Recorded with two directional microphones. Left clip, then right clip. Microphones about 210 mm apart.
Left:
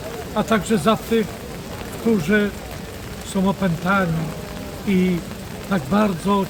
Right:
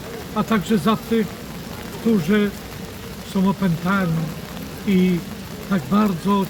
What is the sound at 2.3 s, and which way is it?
Speech, 15° left (ahead or behind).